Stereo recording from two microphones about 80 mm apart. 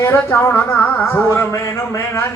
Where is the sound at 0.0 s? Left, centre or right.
Left.